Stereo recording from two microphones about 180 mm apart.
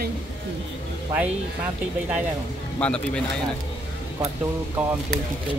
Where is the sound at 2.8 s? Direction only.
5° left (ahead or behind).